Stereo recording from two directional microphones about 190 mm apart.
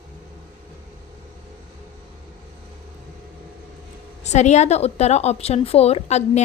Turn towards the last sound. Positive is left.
turn(degrees=35)  # may be behind; listen again after turning